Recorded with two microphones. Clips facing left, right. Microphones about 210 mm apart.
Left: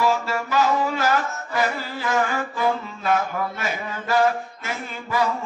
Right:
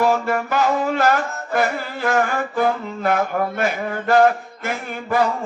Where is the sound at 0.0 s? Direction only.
55° right (ahead or behind).